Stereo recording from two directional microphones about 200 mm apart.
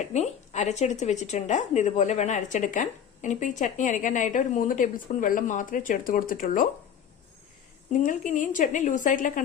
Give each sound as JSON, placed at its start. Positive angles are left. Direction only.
{"t": 0.1, "sound": "speech", "side_deg": 35}
{"t": 7.9, "sound": "speech", "side_deg": 40}